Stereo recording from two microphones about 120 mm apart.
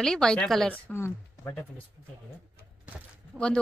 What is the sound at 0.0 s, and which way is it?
A woman's voice, 5° left (ahead or behind).